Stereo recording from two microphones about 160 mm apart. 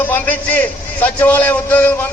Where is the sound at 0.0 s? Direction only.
10° left (ahead or behind).